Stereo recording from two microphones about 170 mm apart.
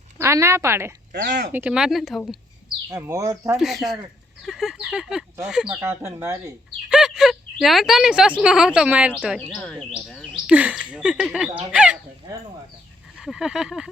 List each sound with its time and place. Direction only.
0.2 s a woman's voice: 15° right (ahead or behind); by 2.4 s centre (ahead or behind)
2.9 s speech: 20° right (ahead or behind)
3.6 s speech: centre (ahead or behind)
5.8 s a woman's voice: 15° right (ahead or behind)
6.9 s speech: centre (ahead or behind)
13.1 s speech: centre (ahead or behind)